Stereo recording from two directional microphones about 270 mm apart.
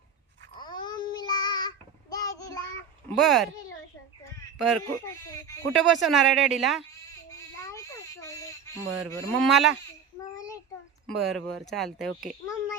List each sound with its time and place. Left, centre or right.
0.6 s child singing: centre
3.1 s speech: centre
4.5 s speech: centre
5.7 s speech: centre
7.3 s a sound: centre
9.0 s speech: centre
10.3 s a sound: centre
11.0 s a child's voice: centre